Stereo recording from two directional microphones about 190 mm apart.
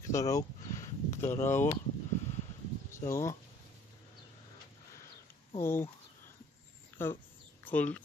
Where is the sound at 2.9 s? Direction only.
15° left (ahead or behind).